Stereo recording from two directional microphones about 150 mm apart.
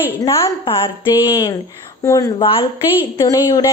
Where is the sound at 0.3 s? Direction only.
35° left (ahead or behind).